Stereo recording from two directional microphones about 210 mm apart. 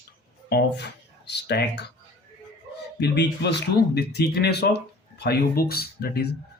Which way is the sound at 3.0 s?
55° left (ahead or behind).